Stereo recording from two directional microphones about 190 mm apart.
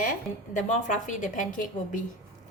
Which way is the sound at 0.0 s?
45° left (ahead or behind).